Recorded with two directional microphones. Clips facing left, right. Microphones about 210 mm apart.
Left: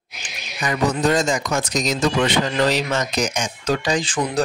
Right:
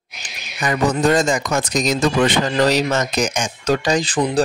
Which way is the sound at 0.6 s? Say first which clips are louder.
Right 2 dB; 50° right (ahead or behind).